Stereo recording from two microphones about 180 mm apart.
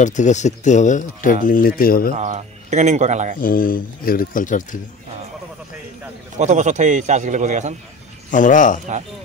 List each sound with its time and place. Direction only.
0.0 s speech: 40° left (ahead or behind)
2.1 s a man's voice: 40° right (ahead or behind)
3.3 s speech: 50° left (ahead or behind)
6.3 s a man's voice: 40° right (ahead or behind)
8.3 s speech: 45° left (ahead or behind)